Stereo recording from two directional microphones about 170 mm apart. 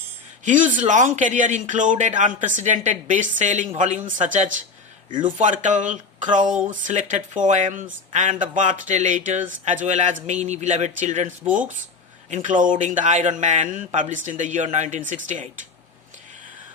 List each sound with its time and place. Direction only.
0.4 s speech: 50° right (ahead or behind)
12.3 s speech: 50° right (ahead or behind)